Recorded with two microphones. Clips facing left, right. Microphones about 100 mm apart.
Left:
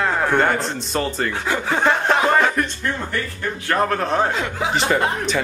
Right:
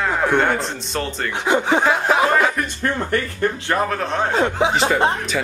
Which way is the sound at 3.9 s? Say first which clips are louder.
Left 1 dB; centre (ahead or behind).